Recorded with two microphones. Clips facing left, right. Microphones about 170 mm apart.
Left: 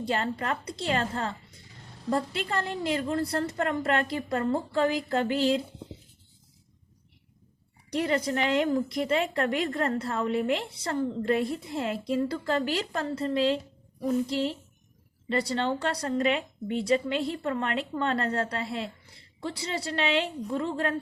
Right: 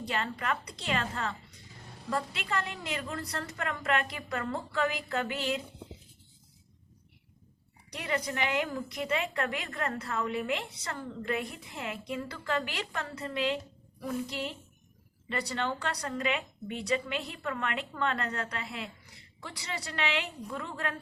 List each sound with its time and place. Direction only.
0.0 s a woman's voice: 30° left (ahead or behind)
7.9 s a woman's voice: 30° left (ahead or behind)